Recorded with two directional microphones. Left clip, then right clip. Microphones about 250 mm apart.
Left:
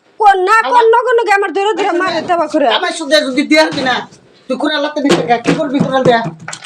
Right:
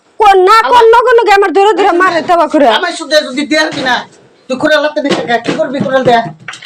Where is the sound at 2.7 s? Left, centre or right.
Left.